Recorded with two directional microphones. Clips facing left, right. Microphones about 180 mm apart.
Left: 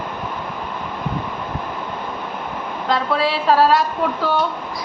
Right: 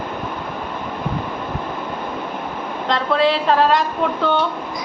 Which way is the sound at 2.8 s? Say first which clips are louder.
Right 2 dB; 5° left (ahead or behind).